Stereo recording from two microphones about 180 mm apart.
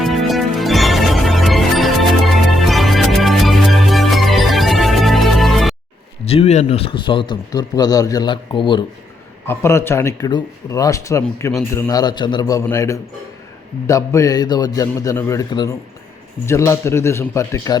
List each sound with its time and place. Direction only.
0.0 s music: centre (ahead or behind)
6.2 s a man's voice: 35° left (ahead or behind)
9.5 s a man's voice: 15° left (ahead or behind)